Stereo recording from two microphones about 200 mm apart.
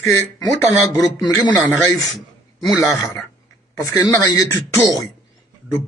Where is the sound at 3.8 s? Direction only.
15° left (ahead or behind).